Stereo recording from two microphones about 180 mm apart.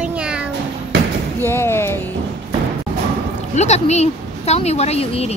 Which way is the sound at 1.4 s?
15° left (ahead or behind).